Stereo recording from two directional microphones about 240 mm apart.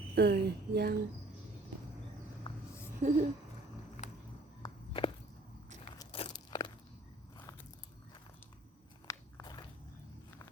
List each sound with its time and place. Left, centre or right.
0.2 s speech: right
2.5 s a sound: left
3.0 s speech: right
4.0 s music: left
4.6 s walk: left
6.0 s crunch: left
9.0 s biting: centre